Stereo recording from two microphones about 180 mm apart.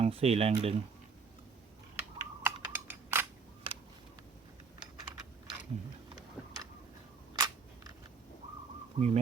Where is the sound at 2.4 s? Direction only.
10° right (ahead or behind).